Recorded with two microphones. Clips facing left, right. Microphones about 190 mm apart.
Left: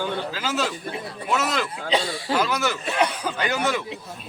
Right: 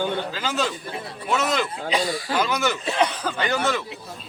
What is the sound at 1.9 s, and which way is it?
Speech, 25° left (ahead or behind).